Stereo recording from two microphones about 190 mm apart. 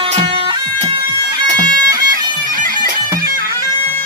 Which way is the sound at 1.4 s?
20° right (ahead or behind).